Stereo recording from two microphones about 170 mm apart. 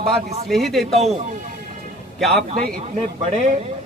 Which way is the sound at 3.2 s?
45° right (ahead or behind).